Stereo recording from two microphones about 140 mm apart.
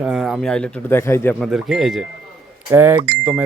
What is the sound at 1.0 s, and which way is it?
Speech, 20° left (ahead or behind).